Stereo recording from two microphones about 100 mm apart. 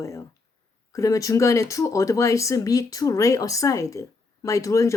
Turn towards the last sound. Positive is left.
turn(degrees=30)  # may be behind; listen again after turning